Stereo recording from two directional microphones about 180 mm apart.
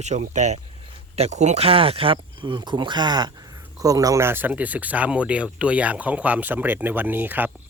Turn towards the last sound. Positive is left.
turn(degrees=-10)  # may be behind; listen again after turning